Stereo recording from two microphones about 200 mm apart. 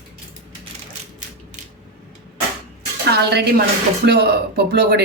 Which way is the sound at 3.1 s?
55° right (ahead or behind).